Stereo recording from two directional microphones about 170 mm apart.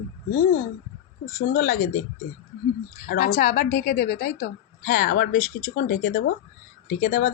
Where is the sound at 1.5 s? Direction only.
60° left (ahead or behind).